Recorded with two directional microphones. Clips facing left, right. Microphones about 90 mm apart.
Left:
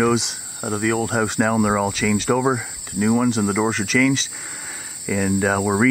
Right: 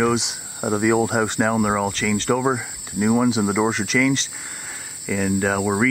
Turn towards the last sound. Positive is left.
turn(degrees=5)  # may be behind; listen again after turning